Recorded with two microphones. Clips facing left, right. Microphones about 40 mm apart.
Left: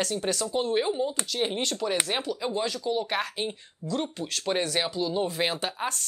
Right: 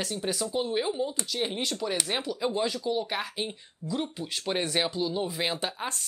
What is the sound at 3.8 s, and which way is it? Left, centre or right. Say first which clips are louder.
Speech: left 2 dB; left.